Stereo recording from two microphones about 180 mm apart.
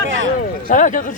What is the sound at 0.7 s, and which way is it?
Speech, 45° left (ahead or behind).